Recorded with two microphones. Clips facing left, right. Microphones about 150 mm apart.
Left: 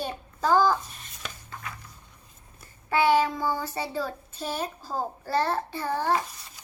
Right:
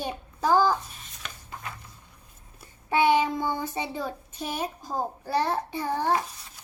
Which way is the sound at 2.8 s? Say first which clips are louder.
Even; 20° right (ahead or behind).